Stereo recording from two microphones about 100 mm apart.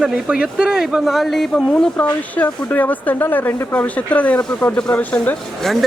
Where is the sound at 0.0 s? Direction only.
10° right (ahead or behind).